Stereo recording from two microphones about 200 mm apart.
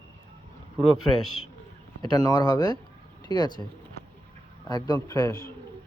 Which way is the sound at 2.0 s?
20° left (ahead or behind).